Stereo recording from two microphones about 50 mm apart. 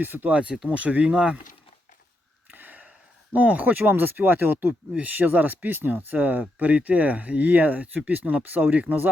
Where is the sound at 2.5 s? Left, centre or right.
Right.